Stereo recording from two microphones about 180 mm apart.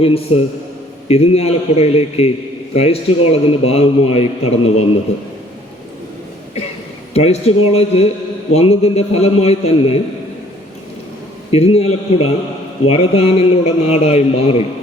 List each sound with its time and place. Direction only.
0.0 s a man's voice: 35° left (ahead or behind)
7.1 s a man's voice: 35° left (ahead or behind)
11.5 s a man's voice: 35° left (ahead or behind)